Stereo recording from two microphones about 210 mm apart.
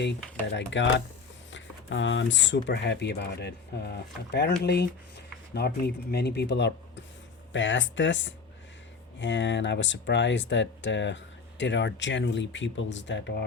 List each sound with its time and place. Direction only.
0.5 s speech: 60° left (ahead or behind)